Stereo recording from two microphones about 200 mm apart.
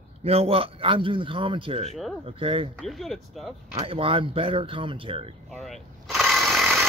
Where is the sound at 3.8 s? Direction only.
30° right (ahead or behind).